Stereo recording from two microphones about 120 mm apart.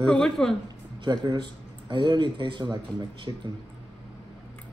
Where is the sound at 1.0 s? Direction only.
40° right (ahead or behind).